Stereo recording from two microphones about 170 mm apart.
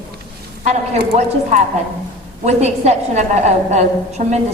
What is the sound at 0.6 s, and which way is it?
A woman's voice, 50° right (ahead or behind).